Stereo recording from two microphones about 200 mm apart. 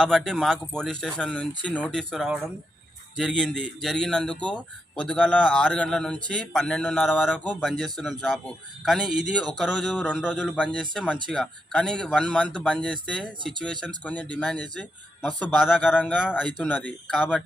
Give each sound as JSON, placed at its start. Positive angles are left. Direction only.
{"t": 0.0, "sound": "a man's voice", "side_deg": 0}
{"t": 13.4, "sound": "speech", "side_deg": -25}
{"t": 13.7, "sound": "a man's voice", "side_deg": 5}
{"t": 16.0, "sound": "speech", "side_deg": 10}